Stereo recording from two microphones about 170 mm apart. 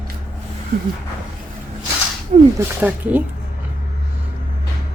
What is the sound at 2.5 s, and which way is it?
Speech, 10° right (ahead or behind).